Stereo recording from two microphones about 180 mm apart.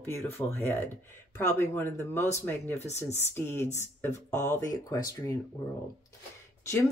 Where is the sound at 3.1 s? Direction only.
15° left (ahead or behind).